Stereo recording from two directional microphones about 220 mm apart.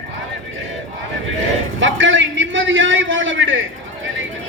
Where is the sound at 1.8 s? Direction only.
60° right (ahead or behind).